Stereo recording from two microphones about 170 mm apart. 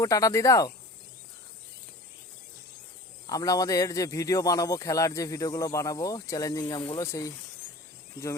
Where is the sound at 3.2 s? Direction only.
20° left (ahead or behind).